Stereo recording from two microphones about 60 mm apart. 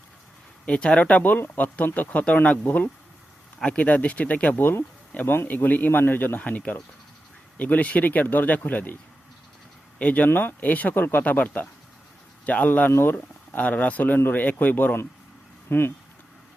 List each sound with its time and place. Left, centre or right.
0.6 s speech: centre
5.2 s speech: left
10.0 s speech: left
10.2 s speech: left
12.9 s speech: left
13.1 s speech: left
15.7 s speech: left